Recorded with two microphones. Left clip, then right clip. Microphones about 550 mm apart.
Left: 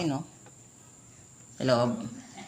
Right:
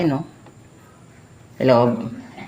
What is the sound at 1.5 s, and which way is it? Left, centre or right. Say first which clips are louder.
Speech: right 11 dB; left.